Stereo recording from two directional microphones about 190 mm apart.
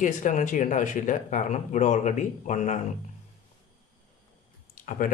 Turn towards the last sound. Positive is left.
turn(degrees=40)  # may be behind; listen again after turning